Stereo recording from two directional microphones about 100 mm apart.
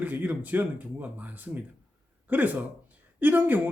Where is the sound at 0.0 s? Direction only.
15° right (ahead or behind).